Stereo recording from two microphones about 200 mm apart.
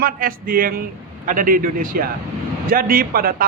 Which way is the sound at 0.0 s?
45° right (ahead or behind).